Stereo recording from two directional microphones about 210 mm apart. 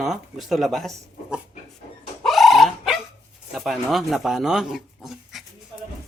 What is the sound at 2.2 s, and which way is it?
Dog, centre (ahead or behind).